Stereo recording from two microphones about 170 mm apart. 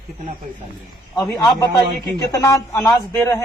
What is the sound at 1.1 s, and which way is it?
A man's voice, 15° left (ahead or behind).